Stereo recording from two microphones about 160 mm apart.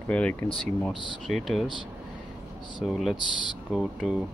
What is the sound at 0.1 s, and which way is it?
Speech, 10° left (ahead or behind).